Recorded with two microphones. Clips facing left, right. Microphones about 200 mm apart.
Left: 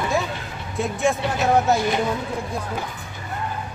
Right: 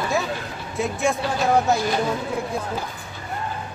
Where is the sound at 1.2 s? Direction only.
20° left (ahead or behind).